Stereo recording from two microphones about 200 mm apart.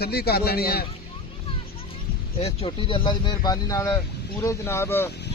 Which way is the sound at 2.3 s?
30° left (ahead or behind).